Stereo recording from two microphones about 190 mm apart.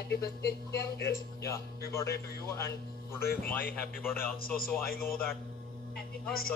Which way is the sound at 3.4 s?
10° left (ahead or behind).